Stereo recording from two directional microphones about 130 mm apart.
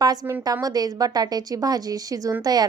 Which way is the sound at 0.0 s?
30° right (ahead or behind).